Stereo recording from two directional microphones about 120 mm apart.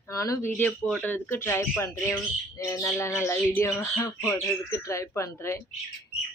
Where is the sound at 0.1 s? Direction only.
25° left (ahead or behind).